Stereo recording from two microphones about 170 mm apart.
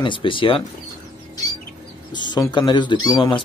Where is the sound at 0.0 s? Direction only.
30° left (ahead or behind).